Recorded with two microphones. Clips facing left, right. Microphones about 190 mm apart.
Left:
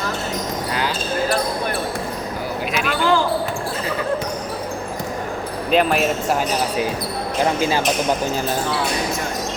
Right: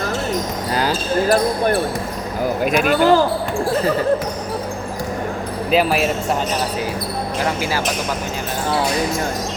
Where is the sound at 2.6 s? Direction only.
50° right (ahead or behind).